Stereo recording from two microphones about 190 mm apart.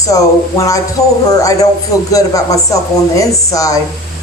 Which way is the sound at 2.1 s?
15° left (ahead or behind).